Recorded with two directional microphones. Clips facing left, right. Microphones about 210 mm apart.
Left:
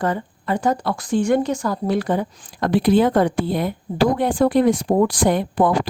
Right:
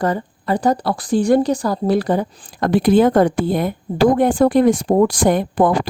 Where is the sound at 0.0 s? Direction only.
40° right (ahead or behind).